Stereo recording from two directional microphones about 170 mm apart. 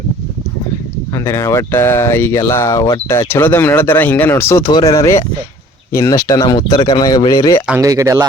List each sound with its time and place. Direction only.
1.1 s speech: 15° left (ahead or behind)
7.8 s speech: 20° right (ahead or behind)